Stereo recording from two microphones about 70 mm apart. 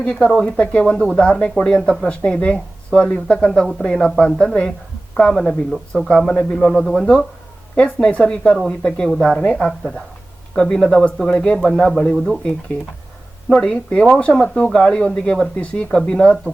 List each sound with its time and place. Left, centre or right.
0.0 s a man's voice: centre
9.4 s a man's voice: centre
12.4 s a man's voice: centre